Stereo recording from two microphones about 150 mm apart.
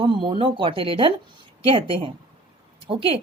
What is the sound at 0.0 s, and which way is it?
Speech, 35° right (ahead or behind).